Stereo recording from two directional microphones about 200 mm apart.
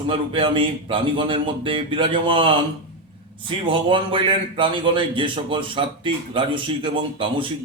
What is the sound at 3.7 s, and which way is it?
Speech, 25° right (ahead or behind).